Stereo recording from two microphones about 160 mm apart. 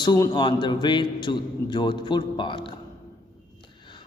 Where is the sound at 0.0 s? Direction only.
25° left (ahead or behind).